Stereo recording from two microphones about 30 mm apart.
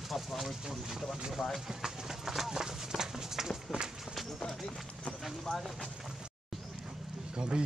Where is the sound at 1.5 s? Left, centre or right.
Centre.